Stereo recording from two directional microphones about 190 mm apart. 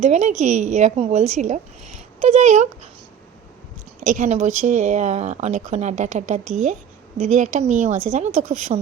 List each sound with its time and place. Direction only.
0.0 s a woman's voice: 40° right (ahead or behind)
4.0 s a woman's voice: 40° right (ahead or behind)